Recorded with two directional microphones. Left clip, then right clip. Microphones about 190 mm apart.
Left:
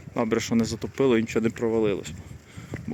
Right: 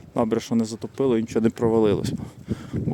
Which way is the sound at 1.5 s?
30° right (ahead or behind).